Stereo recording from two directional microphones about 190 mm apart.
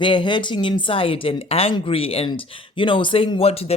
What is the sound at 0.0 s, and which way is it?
Speech, 25° left (ahead or behind).